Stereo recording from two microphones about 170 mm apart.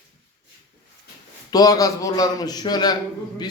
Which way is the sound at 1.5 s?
20° left (ahead or behind).